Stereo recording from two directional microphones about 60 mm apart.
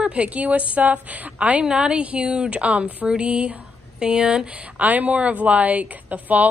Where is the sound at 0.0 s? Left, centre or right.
Centre.